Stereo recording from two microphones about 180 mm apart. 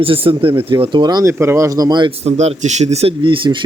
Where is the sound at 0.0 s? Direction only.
30° right (ahead or behind).